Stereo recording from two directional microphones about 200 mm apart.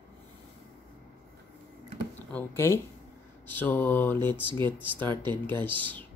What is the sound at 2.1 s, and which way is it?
Speech, 10° left (ahead or behind).